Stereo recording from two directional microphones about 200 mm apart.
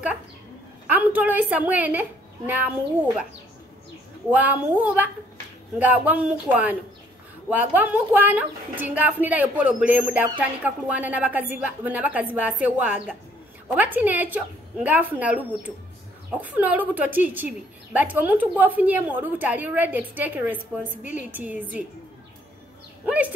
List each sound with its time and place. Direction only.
0.8 s a child's voice: 10° right (ahead or behind)
4.3 s a woman's voice: 10° right (ahead or behind)
23.0 s a woman's voice: 5° right (ahead or behind)